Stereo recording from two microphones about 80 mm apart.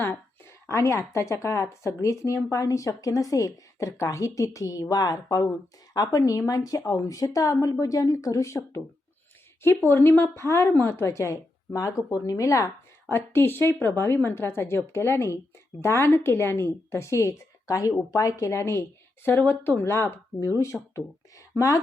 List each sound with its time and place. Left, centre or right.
0.0 s a woman's voice: left
13.1 s a woman's voice: left
20.7 s speech: centre